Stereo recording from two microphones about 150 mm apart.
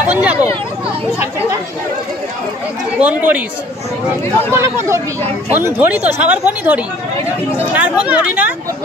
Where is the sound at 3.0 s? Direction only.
10° right (ahead or behind).